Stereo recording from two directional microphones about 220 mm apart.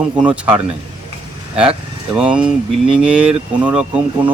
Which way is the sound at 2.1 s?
5° right (ahead or behind).